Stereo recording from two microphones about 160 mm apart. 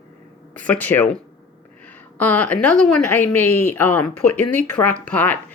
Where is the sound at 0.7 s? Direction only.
10° left (ahead or behind).